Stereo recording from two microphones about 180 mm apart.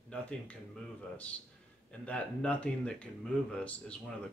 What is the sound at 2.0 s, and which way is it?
Speech, 5° left (ahead or behind).